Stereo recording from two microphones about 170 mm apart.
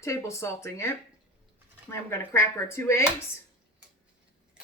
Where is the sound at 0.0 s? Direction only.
15° left (ahead or behind).